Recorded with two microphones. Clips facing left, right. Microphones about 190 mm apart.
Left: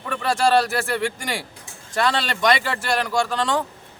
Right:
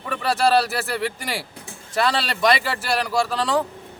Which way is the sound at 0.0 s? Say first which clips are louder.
Even; 5° right (ahead or behind).